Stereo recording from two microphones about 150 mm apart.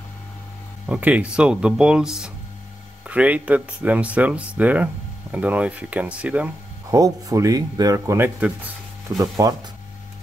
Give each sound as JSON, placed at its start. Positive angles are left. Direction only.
{"t": 0.8, "sound": "speech", "side_deg": -10}
{"t": 6.9, "sound": "speech", "side_deg": -25}